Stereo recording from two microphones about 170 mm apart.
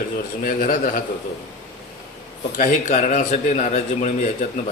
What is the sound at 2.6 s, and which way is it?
A man's voice, 45° left (ahead or behind).